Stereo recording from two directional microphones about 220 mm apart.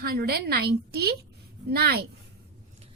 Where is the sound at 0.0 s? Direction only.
45° right (ahead or behind).